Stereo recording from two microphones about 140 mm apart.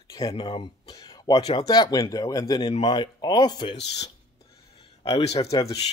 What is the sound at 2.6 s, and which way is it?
Speech, 45° left (ahead or behind).